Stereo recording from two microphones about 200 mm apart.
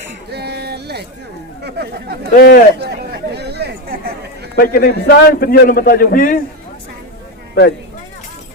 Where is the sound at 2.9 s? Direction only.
55° right (ahead or behind).